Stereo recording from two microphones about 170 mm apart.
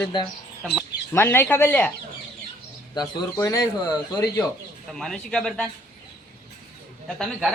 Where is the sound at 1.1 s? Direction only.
15° left (ahead or behind).